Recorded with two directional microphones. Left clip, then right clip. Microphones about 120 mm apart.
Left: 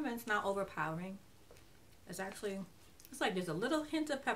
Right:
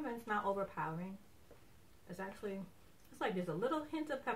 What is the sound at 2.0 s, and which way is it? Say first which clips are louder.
Speech: left 3 dB; 15° left (ahead or behind).